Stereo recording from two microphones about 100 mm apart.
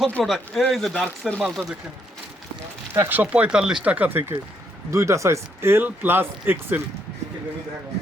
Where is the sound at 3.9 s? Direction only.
20° right (ahead or behind).